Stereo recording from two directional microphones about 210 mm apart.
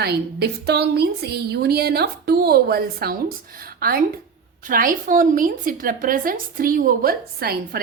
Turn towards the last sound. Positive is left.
turn(degrees=-45)  # may be behind; listen again after turning